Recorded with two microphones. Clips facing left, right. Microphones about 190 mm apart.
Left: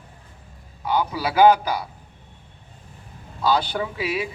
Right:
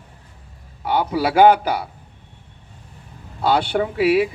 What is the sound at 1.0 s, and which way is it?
Speech, 30° right (ahead or behind).